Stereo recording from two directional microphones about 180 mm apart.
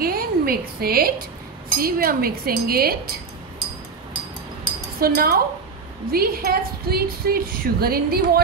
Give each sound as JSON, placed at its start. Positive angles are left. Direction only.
{"t": 0.0, "sound": "a sound", "side_deg": -55}
{"t": 1.8, "sound": "speech", "side_deg": -55}
{"t": 5.0, "sound": "speech", "side_deg": -55}